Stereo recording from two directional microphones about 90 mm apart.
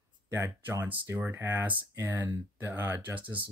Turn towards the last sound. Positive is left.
turn(degrees=-20)  # may be behind; listen again after turning